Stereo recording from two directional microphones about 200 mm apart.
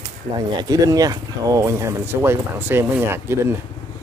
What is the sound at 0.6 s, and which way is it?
Speech, 20° right (ahead or behind).